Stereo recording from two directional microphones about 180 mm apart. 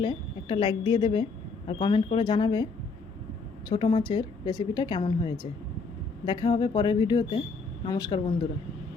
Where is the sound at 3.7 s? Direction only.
25° left (ahead or behind).